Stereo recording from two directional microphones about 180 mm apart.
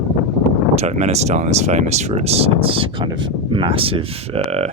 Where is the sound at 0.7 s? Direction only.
35° right (ahead or behind).